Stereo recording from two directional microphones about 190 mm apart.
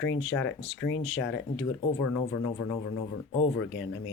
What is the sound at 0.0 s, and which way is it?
Speech, 90° left.